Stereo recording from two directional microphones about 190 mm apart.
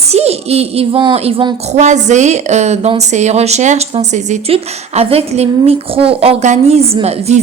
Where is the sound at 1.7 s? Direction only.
40° right (ahead or behind).